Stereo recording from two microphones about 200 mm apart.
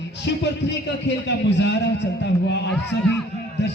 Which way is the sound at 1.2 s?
60° left (ahead or behind).